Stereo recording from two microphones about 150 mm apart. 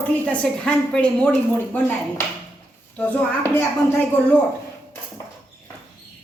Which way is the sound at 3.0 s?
10° left (ahead or behind).